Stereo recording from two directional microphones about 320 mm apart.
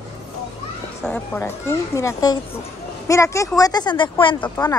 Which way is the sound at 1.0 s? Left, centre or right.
Centre.